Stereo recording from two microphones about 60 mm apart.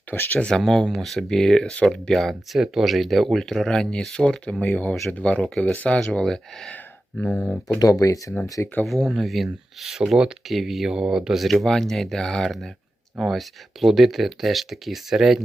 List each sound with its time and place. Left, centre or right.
0.1 s speech: left
0.3 s speech: centre
0.6 s speech: centre
4.6 s speech: left; by 6.7 s centre
7.8 s speech: left
8.8 s speech: centre
10.9 s speech: centre